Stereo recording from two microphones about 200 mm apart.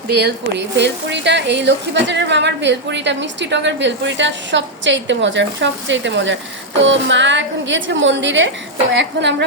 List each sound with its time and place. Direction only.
0.8 s a woman's voice: 60° right (ahead or behind)